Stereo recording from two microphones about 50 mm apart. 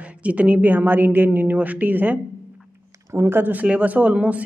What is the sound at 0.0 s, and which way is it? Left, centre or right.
A woman's voice, right.